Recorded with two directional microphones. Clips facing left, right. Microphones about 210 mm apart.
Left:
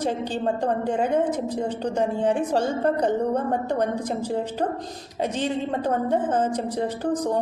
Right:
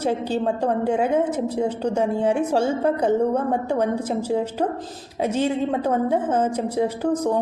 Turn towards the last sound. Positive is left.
turn(degrees=-10)  # may be behind; listen again after turning